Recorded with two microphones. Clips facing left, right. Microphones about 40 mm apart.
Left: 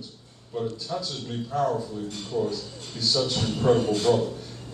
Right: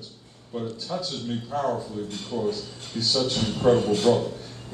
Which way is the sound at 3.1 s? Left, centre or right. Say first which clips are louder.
Right 1 dB; centre.